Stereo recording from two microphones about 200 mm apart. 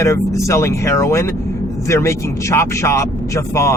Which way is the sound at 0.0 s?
15° left (ahead or behind).